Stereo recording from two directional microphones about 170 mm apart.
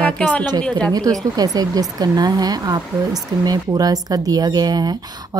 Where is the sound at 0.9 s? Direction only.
20° right (ahead or behind).